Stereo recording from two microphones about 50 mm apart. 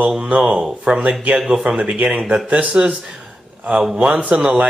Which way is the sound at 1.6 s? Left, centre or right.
Right.